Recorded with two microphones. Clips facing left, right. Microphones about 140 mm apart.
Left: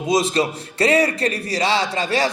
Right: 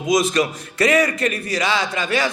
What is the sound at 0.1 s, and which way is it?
A man's voice, 30° left (ahead or behind).